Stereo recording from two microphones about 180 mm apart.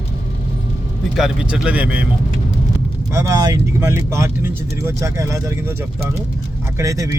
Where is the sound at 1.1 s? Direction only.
5° right (ahead or behind).